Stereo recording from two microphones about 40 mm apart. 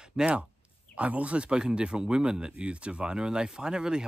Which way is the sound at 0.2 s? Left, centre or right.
Centre.